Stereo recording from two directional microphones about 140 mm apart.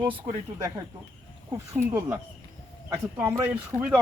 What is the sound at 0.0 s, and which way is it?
Speech, 35° right (ahead or behind).